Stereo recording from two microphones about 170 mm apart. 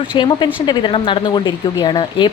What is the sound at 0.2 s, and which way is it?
Speech, 30° left (ahead or behind).